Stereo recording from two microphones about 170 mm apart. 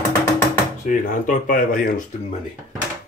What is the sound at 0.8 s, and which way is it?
Speech, 50° left (ahead or behind).